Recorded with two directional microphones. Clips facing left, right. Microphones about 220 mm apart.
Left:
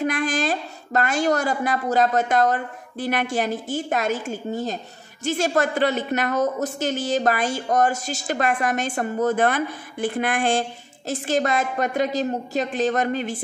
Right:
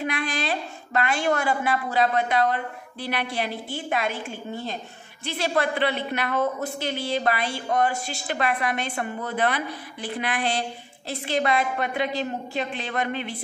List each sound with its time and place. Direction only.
0.0 s a woman's voice: 45° left (ahead or behind)